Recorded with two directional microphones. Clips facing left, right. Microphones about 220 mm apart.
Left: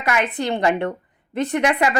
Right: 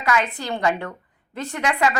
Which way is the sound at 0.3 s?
20° left (ahead or behind).